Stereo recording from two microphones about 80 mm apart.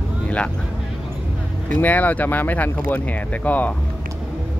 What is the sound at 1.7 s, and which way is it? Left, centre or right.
Speech, centre.